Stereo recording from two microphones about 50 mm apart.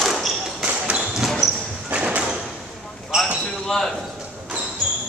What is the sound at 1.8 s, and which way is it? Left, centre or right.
Sliding door, right.